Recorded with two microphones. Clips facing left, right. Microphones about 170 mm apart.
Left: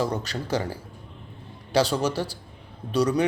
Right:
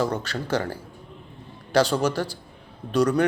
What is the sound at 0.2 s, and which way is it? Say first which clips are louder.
Speech: right 1 dB; 35° left (ahead or behind).